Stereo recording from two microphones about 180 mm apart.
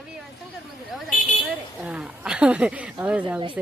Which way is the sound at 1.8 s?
5° right (ahead or behind).